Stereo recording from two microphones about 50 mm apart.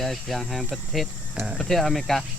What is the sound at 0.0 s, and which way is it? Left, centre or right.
Speech, centre.